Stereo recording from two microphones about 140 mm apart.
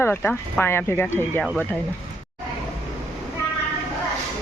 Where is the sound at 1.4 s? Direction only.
Centre (ahead or behind).